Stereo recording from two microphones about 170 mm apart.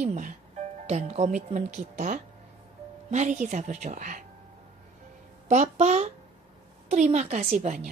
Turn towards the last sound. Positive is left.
turn(degrees=-45)  # may be behind; listen again after turning